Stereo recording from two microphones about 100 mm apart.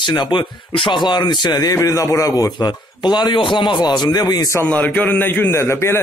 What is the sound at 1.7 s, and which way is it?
A man's voice, 35° left (ahead or behind).